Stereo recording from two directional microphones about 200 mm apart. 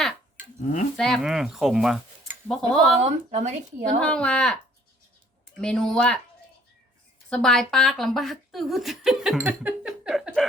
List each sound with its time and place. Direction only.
0.9 s speech: centre (ahead or behind)
3.0 s speech: 35° right (ahead or behind)
4.0 s speech: 5° left (ahead or behind)
5.5 s speech: 5° left (ahead or behind)
7.3 s speech: 5° left (ahead or behind)